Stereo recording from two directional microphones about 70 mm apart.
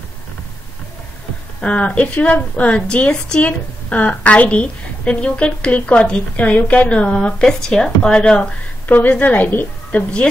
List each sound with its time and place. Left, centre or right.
1.6 s a woman's voice: centre